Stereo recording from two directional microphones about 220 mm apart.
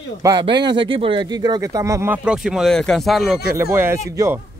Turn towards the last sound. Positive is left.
turn(degrees=-10)  # may be behind; listen again after turning